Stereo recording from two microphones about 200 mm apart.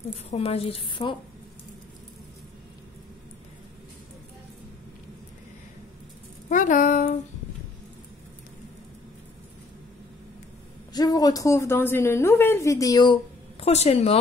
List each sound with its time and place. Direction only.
0.3 s a woman's voice: 30° left (ahead or behind)
6.5 s speech: 40° left (ahead or behind)
10.9 s a woman's voice: 20° left (ahead or behind)